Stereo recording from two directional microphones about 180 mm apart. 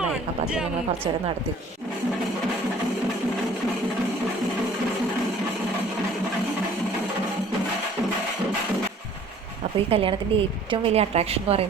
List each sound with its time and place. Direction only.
0.0 s speech: 5° right (ahead or behind)
9.9 s a woman's voice: 30° right (ahead or behind)